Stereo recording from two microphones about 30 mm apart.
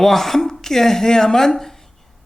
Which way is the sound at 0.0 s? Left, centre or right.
Centre.